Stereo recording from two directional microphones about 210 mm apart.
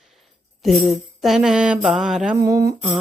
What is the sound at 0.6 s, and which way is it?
Mantra, centre (ahead or behind).